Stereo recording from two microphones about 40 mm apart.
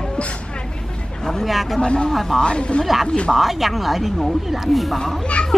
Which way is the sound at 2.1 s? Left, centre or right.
Centre.